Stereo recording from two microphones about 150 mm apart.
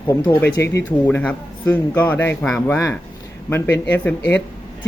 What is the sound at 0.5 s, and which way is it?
Speech, 20° left (ahead or behind).